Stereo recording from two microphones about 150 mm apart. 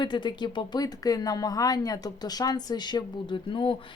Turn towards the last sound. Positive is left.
turn(degrees=35)  # may be behind; listen again after turning